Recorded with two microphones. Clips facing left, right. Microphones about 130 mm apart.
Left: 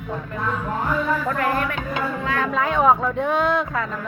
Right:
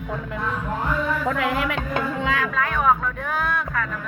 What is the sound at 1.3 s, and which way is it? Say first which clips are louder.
Speech: left 1 dB; 90° right.